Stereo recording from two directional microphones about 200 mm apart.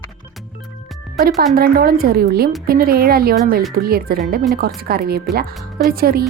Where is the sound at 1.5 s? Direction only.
50° right (ahead or behind).